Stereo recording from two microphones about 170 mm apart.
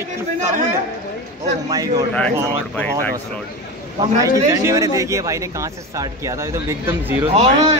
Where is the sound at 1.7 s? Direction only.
20° right (ahead or behind).